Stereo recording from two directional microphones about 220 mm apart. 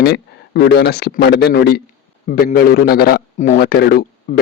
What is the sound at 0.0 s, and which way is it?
A man's voice, 50° left (ahead or behind).